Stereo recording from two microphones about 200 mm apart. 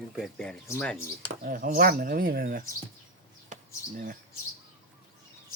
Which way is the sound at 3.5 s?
35° right (ahead or behind).